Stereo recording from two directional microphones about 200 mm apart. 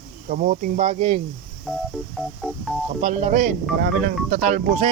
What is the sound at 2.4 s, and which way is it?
Speech, centre (ahead or behind).